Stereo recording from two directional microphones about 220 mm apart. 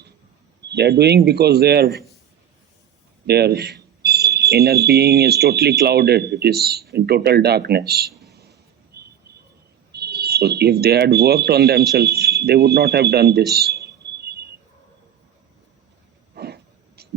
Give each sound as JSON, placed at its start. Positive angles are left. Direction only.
{"t": 0.7, "sound": "speech", "side_deg": -50}
{"t": 3.2, "sound": "speech", "side_deg": -45}
{"t": 9.9, "sound": "speech", "side_deg": -45}
{"t": 16.3, "sound": "a sound", "side_deg": -45}